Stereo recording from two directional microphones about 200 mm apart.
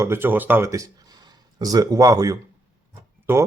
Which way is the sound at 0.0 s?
10° right (ahead or behind).